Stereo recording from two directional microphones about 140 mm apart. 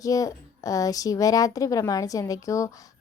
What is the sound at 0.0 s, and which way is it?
Speech, 25° left (ahead or behind).